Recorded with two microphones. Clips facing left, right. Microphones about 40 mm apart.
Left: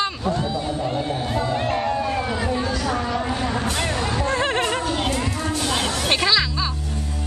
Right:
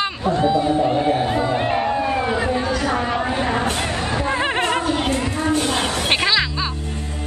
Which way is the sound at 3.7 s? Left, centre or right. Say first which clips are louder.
Right 1 dB; centre.